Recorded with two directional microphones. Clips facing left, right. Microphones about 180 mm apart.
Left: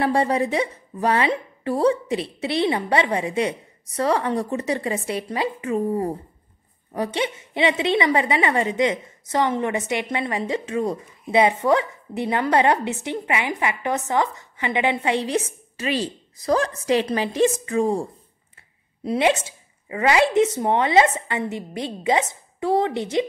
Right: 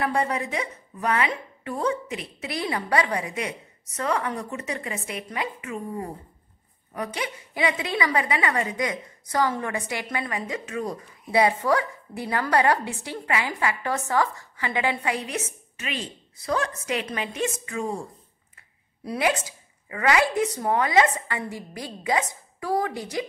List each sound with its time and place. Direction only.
0.0 s a woman's voice: 30° left (ahead or behind)
19.0 s a woman's voice: 25° left (ahead or behind)